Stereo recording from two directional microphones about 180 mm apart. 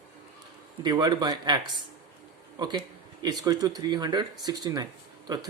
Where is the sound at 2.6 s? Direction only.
25° right (ahead or behind).